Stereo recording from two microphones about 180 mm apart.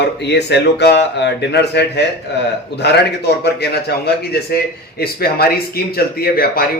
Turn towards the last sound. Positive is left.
turn(degrees=55)  # may be behind; listen again after turning